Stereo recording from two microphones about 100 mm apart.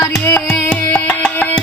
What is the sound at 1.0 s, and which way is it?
Music, 15° left (ahead or behind).